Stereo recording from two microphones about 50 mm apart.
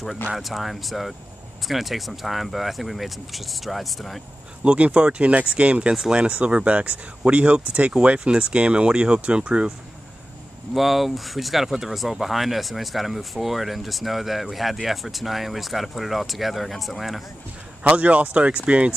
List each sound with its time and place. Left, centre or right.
0.3 s speech: centre
4.6 s speech: right
10.7 s speech: centre
17.8 s speech: right